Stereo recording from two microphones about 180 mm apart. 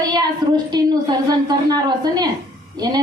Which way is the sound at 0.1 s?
25° right (ahead or behind).